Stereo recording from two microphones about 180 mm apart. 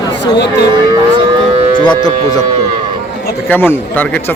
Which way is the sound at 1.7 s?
25° left (ahead or behind).